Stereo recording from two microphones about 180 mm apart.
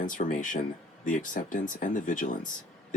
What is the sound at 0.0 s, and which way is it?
Speech, 45° left (ahead or behind).